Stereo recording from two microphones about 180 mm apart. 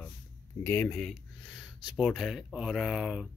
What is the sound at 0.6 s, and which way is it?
Speech, 15° left (ahead or behind).